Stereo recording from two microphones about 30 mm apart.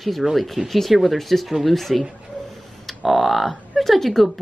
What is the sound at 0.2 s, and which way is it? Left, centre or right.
Speech, centre.